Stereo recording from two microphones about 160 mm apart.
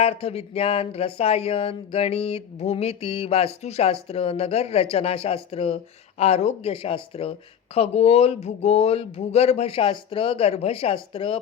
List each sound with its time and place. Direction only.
0.0 s speech: 40° left (ahead or behind)